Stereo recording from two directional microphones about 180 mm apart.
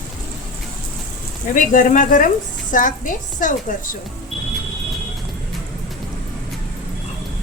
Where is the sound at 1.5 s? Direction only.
45° left (ahead or behind).